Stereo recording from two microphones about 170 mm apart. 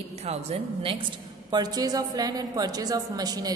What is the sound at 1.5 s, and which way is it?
A woman's voice, 25° right (ahead or behind).